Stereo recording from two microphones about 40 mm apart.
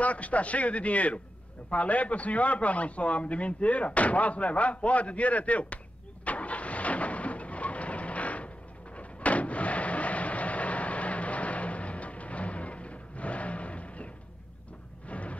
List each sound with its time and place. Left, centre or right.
0.0 s a man's voice: left
6.2 s vehicle: left
15.0 s a sound: left